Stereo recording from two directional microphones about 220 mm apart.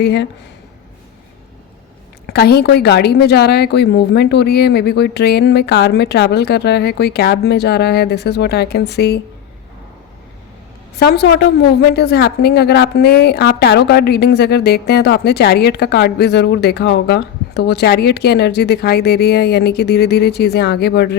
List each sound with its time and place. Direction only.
0.0 s a woman's voice: 50° left (ahead or behind)
2.2 s a woman's voice: 45° left (ahead or behind)
10.9 s a woman's voice: 45° left (ahead or behind)